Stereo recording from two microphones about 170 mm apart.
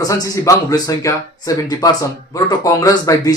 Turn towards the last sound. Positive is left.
turn(degrees=20)  # may be behind; listen again after turning